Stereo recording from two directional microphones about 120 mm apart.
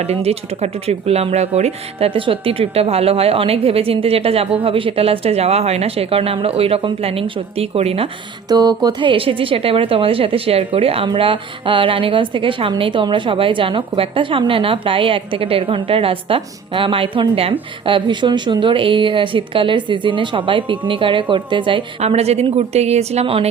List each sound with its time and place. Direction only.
0.0 s a woman's voice: 60° right (ahead or behind)
8.4 s a woman's voice: 35° right (ahead or behind)
22.0 s a woman's voice: 60° right (ahead or behind)